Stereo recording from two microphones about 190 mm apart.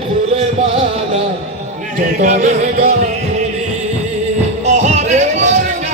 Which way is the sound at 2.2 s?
40° right (ahead or behind).